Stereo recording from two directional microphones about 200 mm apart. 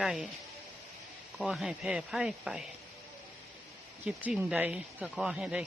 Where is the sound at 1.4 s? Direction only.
5° right (ahead or behind).